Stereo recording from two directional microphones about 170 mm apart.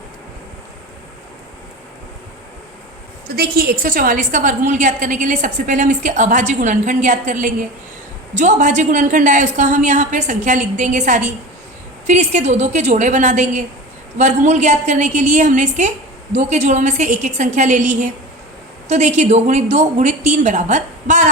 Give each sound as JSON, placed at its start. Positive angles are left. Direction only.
{"t": 3.2, "sound": "a woman's voice", "side_deg": -65}